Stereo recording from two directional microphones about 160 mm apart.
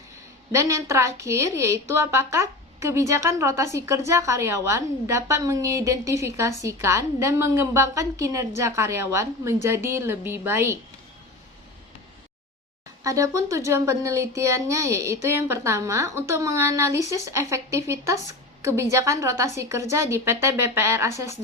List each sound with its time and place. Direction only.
0.5 s a woman's voice: 20° right (ahead or behind)
13.0 s a woman's voice: 20° right (ahead or behind)